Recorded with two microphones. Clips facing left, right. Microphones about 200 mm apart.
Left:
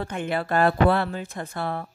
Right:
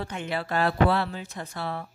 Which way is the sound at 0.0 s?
55° left (ahead or behind).